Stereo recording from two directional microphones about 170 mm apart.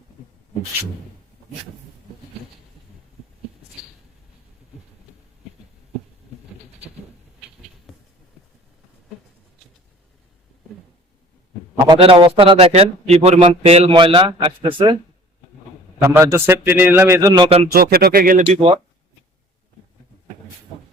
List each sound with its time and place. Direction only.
11.9 s speech: 30° right (ahead or behind)
16.0 s a man's voice: 15° right (ahead or behind); by 17.7 s 30° right (ahead or behind)
17.7 s speech: 65° right (ahead or behind)
18.4 s speech: 35° right (ahead or behind)